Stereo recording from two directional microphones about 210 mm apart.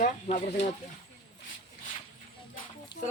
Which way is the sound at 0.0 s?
35° left (ahead or behind).